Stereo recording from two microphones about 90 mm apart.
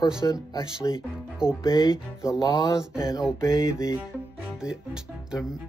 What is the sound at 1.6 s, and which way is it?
Speech, 50° left (ahead or behind).